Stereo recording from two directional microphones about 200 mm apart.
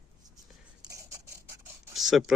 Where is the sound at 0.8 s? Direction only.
15° right (ahead or behind).